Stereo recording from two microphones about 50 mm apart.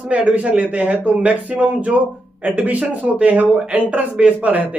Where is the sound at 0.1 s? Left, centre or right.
Right.